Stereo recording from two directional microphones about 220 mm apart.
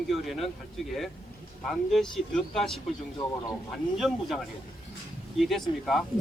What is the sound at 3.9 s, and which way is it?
Speech, centre (ahead or behind).